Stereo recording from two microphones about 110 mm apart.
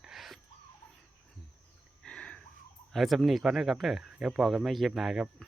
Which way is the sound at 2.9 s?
Centre (ahead or behind).